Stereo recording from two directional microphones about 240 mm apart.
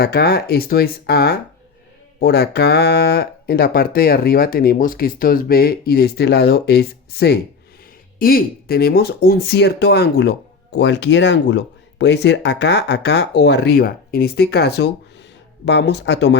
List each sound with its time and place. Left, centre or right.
0.0 s speech: left